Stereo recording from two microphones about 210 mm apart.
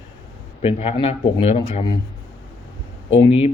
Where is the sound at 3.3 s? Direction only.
30° left (ahead or behind).